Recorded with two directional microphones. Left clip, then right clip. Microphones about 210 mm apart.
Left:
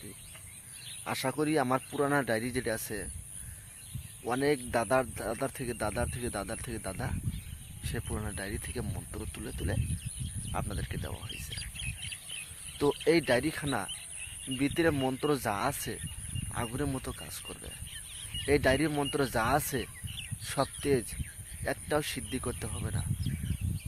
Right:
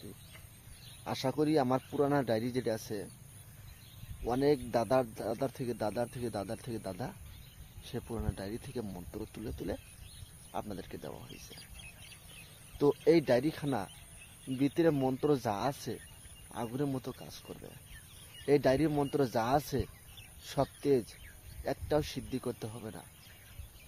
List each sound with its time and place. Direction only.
1.0 s speech: centre (ahead or behind)
4.2 s speech: 5° left (ahead or behind)
8.0 s speech: 15° left (ahead or behind)
11.5 s a sound: 40° right (ahead or behind)
13.1 s speech: centre (ahead or behind)